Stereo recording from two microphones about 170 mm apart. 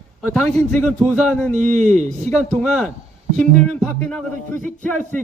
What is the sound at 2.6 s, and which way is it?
A man's voice, 5° left (ahead or behind).